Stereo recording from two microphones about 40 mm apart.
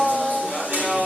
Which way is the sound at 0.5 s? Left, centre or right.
Right.